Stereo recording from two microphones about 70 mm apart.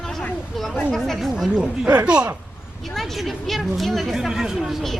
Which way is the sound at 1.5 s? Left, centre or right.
Centre.